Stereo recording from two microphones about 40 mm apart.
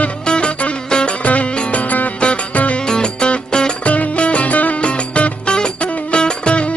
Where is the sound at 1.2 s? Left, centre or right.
Left.